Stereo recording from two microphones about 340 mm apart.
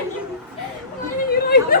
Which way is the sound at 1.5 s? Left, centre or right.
Left.